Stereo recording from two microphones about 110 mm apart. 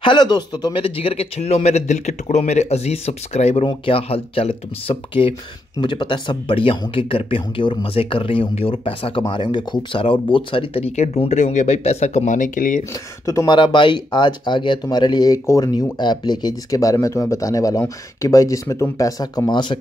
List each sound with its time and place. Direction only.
0.0 s speech: 45° left (ahead or behind)
0.7 s speech: 55° left (ahead or behind); by 3.6 s 80° left
3.6 s speech: 55° left (ahead or behind)
5.8 s speech: 45° left (ahead or behind)
9.3 s speech: 45° left (ahead or behind); by 12.3 s 90° left
13.2 s speech: 30° left (ahead or behind)
13.5 s speech: 45° left (ahead or behind)